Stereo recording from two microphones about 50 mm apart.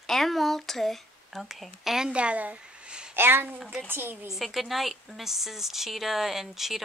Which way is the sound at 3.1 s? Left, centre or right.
Right.